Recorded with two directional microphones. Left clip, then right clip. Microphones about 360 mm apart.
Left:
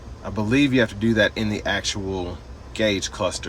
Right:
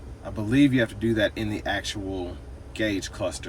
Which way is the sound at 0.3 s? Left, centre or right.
Centre.